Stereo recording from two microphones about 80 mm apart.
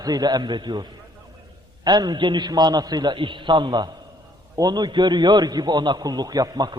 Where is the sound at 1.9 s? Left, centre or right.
Right.